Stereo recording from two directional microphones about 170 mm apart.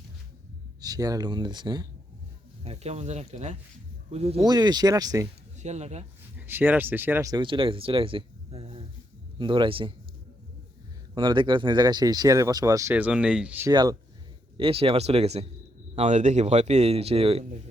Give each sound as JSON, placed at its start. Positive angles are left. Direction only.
{"t": 0.8, "sound": "speech", "side_deg": -20}
{"t": 2.6, "sound": "speech", "side_deg": -40}
{"t": 4.4, "sound": "speech", "side_deg": -25}
{"t": 5.5, "sound": "speech", "side_deg": -40}
{"t": 6.3, "sound": "speech", "side_deg": -10}
{"t": 11.1, "sound": "speech", "side_deg": -25}
{"t": 13.7, "sound": "speech", "side_deg": -20}
{"t": 14.6, "sound": "speech", "side_deg": -35}